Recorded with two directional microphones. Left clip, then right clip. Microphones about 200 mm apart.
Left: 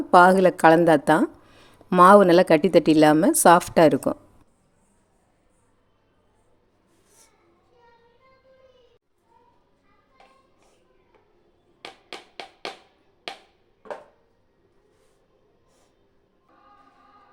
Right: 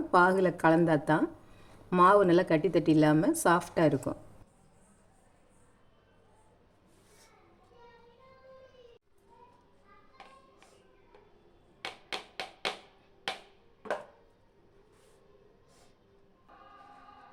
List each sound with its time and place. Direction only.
0.1 s a woman's voice: 50° left (ahead or behind)